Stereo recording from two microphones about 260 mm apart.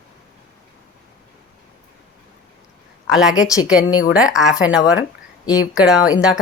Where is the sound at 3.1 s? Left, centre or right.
Centre.